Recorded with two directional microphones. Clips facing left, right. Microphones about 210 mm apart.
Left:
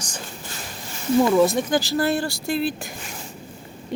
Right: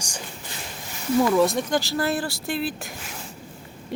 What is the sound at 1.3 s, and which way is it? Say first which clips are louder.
Speech: left 2 dB; centre (ahead or behind).